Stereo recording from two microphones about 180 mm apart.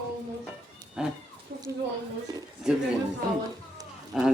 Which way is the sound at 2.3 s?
25° right (ahead or behind).